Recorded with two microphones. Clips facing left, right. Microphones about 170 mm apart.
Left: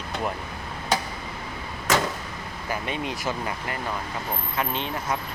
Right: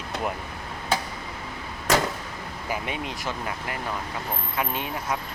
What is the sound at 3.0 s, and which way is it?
Speech, centre (ahead or behind).